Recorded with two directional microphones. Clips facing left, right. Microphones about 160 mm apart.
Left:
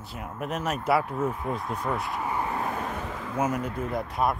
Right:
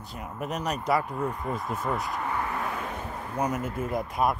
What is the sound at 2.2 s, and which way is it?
Vehicle, 15° left (ahead or behind).